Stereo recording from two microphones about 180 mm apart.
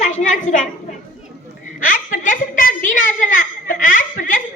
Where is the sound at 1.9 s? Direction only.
45° left (ahead or behind).